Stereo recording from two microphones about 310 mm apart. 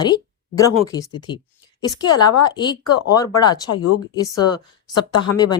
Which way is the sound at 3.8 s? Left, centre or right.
Left.